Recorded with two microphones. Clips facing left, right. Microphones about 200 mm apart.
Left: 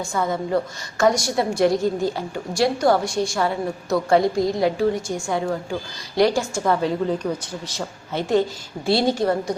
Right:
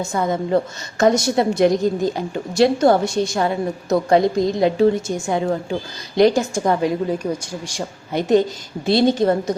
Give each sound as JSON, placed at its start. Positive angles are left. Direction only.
{"t": 0.2, "sound": "a woman's voice", "side_deg": -20}